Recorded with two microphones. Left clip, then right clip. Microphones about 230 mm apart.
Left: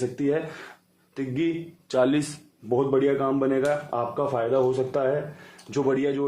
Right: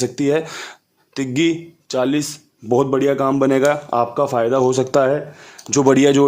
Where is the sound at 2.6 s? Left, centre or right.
Right.